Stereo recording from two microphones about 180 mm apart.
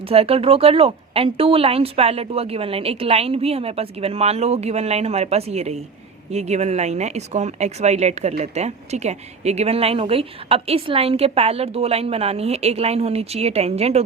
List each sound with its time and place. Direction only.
0.0 s speech: 30° right (ahead or behind)